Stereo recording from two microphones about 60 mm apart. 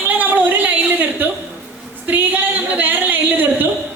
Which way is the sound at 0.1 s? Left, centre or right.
Right.